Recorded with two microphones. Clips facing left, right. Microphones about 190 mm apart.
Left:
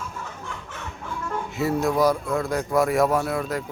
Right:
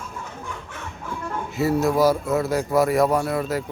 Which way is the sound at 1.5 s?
Centre (ahead or behind).